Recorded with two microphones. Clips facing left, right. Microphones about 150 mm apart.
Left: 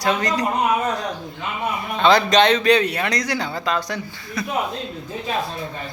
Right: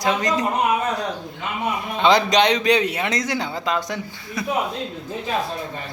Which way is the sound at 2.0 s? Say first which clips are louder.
Left 1 dB; 15° right (ahead or behind).